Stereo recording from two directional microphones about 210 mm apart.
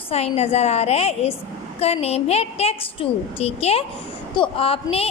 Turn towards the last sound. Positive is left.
turn(degrees=25)  # may be behind; listen again after turning